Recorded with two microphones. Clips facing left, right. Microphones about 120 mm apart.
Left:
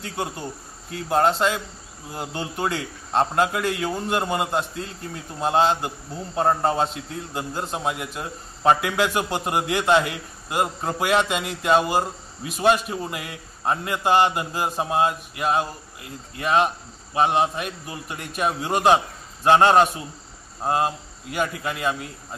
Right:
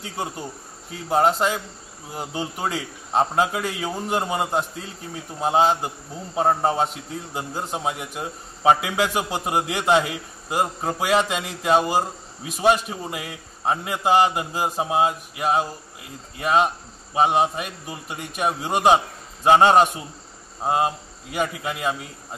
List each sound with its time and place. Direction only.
0.0 s a man's voice: 5° right (ahead or behind)
17.1 s a man's voice: 5° right (ahead or behind)